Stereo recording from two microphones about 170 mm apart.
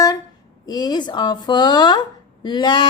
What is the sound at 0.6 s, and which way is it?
A woman's voice, 25° left (ahead or behind).